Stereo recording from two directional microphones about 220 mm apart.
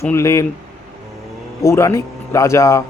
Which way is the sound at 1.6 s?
15° left (ahead or behind).